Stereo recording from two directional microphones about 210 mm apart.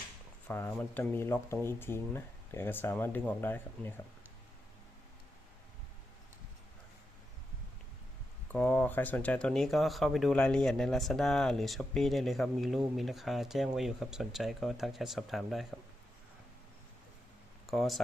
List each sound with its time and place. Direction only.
0.4 s speech: 10° left (ahead or behind)
8.5 s speech: 10° left (ahead or behind)
17.7 s speech: centre (ahead or behind)